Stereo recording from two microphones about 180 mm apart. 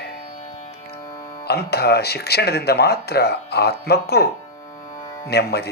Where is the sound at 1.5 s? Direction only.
65° left (ahead or behind).